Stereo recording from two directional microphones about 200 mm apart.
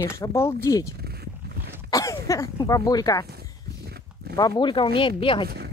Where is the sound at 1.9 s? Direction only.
15° left (ahead or behind).